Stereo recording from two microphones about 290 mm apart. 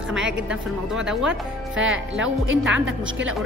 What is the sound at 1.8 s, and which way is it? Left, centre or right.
Speech, right.